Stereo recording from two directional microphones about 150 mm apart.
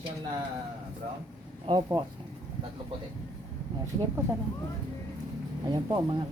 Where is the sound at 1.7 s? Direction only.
35° right (ahead or behind).